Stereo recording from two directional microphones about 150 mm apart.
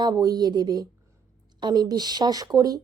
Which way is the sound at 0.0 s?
25° right (ahead or behind).